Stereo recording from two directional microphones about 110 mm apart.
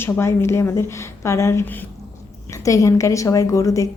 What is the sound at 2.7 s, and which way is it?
A woman's voice, 30° left (ahead or behind).